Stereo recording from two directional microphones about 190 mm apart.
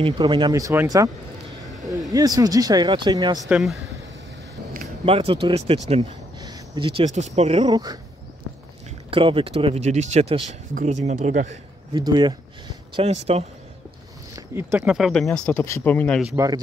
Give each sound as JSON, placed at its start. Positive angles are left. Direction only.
{"t": 0.0, "sound": "speech", "side_deg": -25}
{"t": 2.1, "sound": "speech", "side_deg": -20}
{"t": 3.4, "sound": "speech", "side_deg": -5}
{"t": 5.0, "sound": "speech", "side_deg": -30}
{"t": 6.4, "sound": "speech", "side_deg": -20}
{"t": 7.6, "sound": "speech", "side_deg": -20}
{"t": 9.1, "sound": "speech", "side_deg": -30}
{"t": 11.9, "sound": "speech", "side_deg": -25}
{"t": 13.0, "sound": "speech", "side_deg": -35}
{"t": 14.3, "sound": "a sound", "side_deg": -15}
{"t": 14.8, "sound": "speech", "side_deg": 0}
{"t": 15.3, "sound": "speech", "side_deg": 10}